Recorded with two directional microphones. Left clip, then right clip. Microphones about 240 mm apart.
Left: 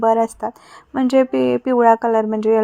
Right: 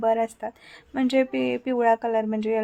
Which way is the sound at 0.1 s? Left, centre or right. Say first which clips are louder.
Left 7 dB; centre.